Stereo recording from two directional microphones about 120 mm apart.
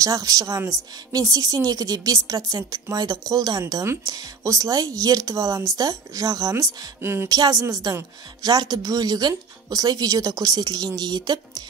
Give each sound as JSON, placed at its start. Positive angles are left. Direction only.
{"t": 0.0, "sound": "speech", "side_deg": -30}
{"t": 7.2, "sound": "a woman's voice", "side_deg": -35}